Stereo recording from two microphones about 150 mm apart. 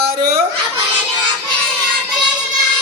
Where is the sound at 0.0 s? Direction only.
90° right.